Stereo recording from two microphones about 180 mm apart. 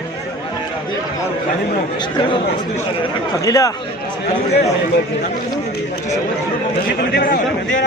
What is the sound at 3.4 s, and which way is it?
Speech, 20° left (ahead or behind).